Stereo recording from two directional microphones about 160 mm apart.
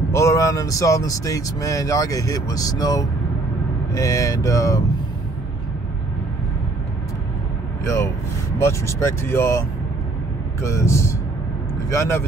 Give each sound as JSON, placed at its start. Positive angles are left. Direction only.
{"t": 0.1, "sound": "speech", "side_deg": 20}
{"t": 7.8, "sound": "speech", "side_deg": 15}